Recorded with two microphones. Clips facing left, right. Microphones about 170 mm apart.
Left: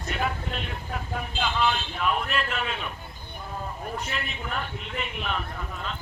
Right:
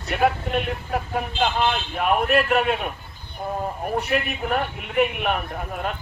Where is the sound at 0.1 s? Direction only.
55° right (ahead or behind).